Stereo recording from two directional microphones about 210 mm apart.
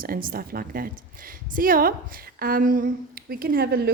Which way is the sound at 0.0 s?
40° right (ahead or behind).